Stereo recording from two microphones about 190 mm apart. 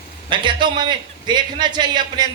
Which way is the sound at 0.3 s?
25° right (ahead or behind).